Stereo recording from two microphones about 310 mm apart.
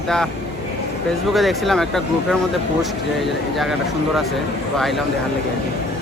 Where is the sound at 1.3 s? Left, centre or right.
Centre.